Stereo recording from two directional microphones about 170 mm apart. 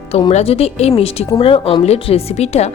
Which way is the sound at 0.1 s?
35° left (ahead or behind).